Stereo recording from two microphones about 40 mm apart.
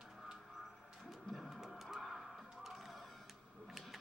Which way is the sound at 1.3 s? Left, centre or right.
Centre.